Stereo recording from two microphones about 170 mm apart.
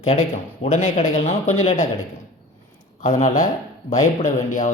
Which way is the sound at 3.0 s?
40° left (ahead or behind).